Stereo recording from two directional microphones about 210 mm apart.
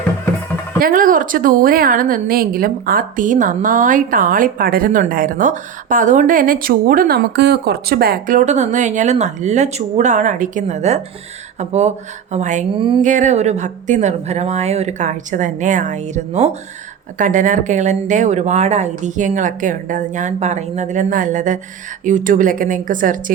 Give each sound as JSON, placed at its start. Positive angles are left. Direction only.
{"t": 0.8, "sound": "a woman's voice", "side_deg": -40}
{"t": 13.0, "sound": "a woman's voice", "side_deg": -35}